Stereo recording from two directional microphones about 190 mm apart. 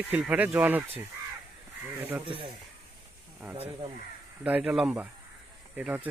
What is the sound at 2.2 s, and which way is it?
Speech, 25° right (ahead or behind).